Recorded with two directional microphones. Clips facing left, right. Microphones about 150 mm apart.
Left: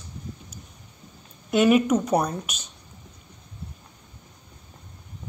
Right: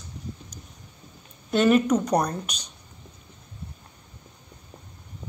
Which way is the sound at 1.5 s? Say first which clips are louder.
Left 1 dB; 10° left (ahead or behind).